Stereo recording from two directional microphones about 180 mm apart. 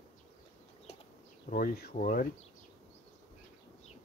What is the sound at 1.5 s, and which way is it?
Speech, 55° left (ahead or behind).